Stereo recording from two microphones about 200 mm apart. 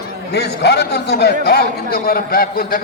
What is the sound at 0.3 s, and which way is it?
A man's voice, 55° left (ahead or behind).